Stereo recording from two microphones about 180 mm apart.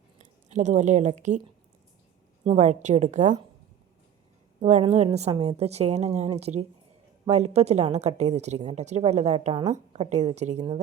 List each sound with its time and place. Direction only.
0.2 s speech: 40° right (ahead or behind)
2.4 s a woman's voice: 35° right (ahead or behind)
4.6 s a woman's voice: 35° right (ahead or behind)